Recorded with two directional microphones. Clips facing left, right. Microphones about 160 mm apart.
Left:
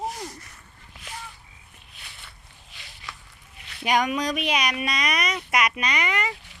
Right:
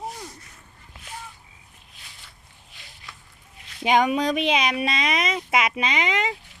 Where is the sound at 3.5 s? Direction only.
70° left (ahead or behind).